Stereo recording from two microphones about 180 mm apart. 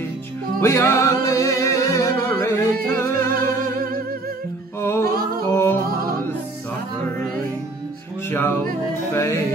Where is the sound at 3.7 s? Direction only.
55° right (ahead or behind).